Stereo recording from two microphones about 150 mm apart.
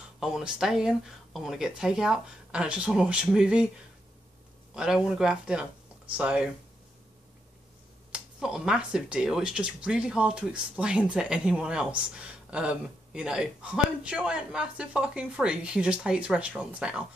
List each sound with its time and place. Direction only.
0.2 s speech: 5° right (ahead or behind)
4.7 s speech: 5° right (ahead or behind)
8.1 s speech: 5° right (ahead or behind)